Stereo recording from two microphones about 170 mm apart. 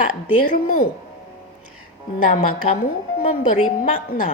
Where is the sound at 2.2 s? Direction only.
55° left (ahead or behind).